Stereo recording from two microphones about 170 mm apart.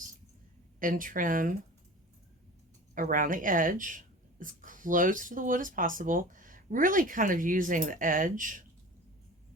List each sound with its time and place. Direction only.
0.8 s speech: 55° right (ahead or behind)
2.9 s speech: 50° right (ahead or behind)